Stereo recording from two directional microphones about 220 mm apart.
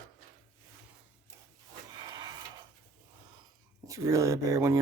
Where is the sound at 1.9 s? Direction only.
20° right (ahead or behind).